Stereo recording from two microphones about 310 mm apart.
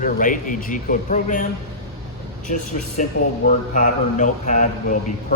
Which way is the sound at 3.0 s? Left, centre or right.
Left.